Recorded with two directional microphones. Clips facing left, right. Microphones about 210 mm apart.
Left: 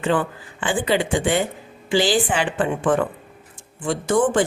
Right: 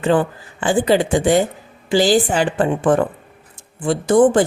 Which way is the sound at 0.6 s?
40° right (ahead or behind).